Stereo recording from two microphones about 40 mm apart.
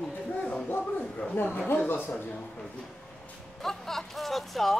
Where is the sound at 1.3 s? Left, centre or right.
Left.